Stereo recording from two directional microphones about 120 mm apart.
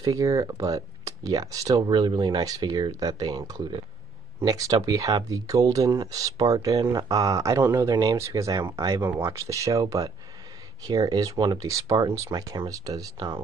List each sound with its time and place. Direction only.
0.0 s speech: 25° right (ahead or behind)